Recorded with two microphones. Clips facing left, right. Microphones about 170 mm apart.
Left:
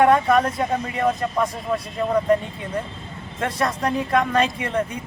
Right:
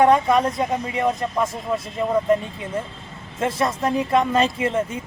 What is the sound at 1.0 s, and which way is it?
A man's voice, centre (ahead or behind).